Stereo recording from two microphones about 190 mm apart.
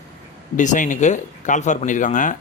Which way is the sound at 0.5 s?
40° left (ahead or behind).